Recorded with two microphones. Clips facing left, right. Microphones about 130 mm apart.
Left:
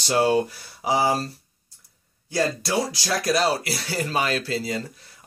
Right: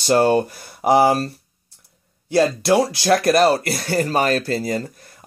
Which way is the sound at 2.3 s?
65° right (ahead or behind).